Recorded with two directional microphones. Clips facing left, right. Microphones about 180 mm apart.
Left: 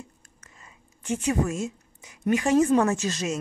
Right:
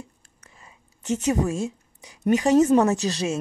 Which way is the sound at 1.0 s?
40° right (ahead or behind).